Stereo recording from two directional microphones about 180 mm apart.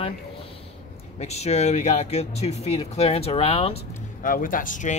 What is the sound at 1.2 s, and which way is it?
Speech, 35° left (ahead or behind).